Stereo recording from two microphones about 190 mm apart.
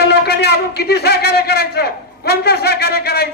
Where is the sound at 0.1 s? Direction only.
60° left (ahead or behind).